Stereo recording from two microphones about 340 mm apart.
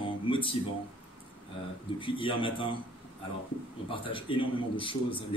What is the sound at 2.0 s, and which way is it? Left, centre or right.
Speech, centre.